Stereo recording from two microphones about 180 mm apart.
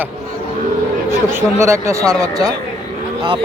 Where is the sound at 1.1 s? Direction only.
15° right (ahead or behind).